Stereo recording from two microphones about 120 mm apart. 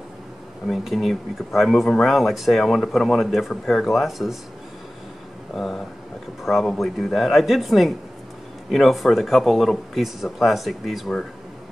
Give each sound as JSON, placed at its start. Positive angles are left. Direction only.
{"t": 0.7, "sound": "speech", "side_deg": 0}
{"t": 5.5, "sound": "speech", "side_deg": 0}